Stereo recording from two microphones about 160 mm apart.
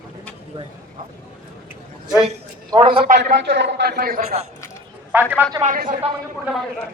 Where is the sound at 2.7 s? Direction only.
35° right (ahead or behind).